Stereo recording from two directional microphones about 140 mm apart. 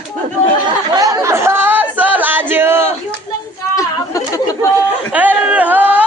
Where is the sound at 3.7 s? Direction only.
25° left (ahead or behind).